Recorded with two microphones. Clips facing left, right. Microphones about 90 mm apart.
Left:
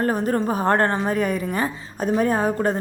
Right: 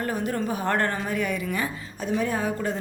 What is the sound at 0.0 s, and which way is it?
A woman's voice, 40° left (ahead or behind).